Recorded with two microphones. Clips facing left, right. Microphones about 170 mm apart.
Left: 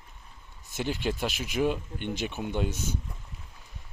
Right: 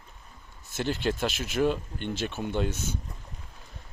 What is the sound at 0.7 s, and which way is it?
Speech, 10° left (ahead or behind).